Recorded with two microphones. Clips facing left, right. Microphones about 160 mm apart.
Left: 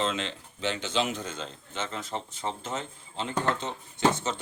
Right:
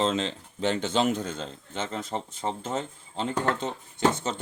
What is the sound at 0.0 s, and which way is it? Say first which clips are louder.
Speech: right 4 dB; 35° right (ahead or behind).